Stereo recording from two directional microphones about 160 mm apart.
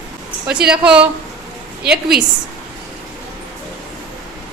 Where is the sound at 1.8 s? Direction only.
80° right.